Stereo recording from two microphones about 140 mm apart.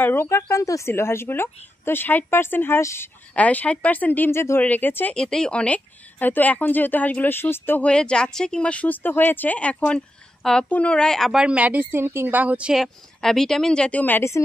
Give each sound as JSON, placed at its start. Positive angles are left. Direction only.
{"t": 0.0, "sound": "a woman's voice", "side_deg": 15}